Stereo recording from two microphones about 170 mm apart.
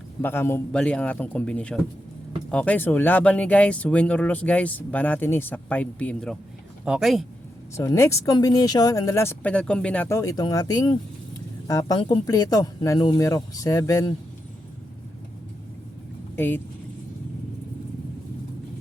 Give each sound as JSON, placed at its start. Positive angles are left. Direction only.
{"t": 0.2, "sound": "speech", "side_deg": 15}
{"t": 7.8, "sound": "speech", "side_deg": 15}
{"t": 16.3, "sound": "speech", "side_deg": 10}